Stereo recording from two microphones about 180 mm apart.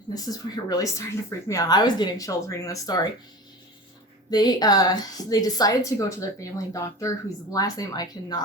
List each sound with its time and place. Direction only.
0.1 s speech: 20° left (ahead or behind)
4.3 s speech: 20° left (ahead or behind)